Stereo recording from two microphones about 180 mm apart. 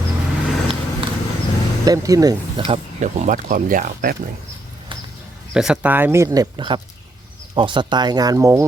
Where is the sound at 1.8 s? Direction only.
20° right (ahead or behind).